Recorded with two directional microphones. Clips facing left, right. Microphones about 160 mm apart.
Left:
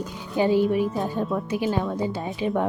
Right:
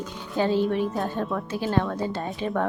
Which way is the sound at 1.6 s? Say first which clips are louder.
Right 3 dB; 5° left (ahead or behind).